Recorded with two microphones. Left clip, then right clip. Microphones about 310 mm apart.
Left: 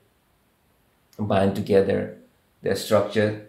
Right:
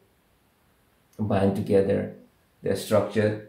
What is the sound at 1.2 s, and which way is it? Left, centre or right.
Speech, left.